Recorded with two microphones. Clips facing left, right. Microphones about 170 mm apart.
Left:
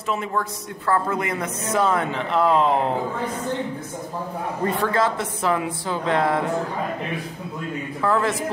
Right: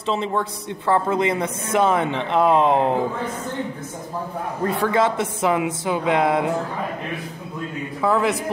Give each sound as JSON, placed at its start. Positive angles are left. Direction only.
{"t": 0.1, "sound": "speech", "side_deg": -25}
{"t": 4.9, "sound": "music", "side_deg": -20}
{"t": 8.0, "sound": "music", "side_deg": -15}